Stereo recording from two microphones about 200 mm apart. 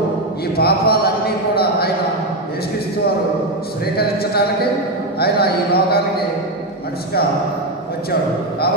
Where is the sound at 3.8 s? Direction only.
50° left (ahead or behind).